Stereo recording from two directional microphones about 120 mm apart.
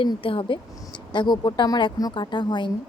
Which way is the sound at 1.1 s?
35° left (ahead or behind).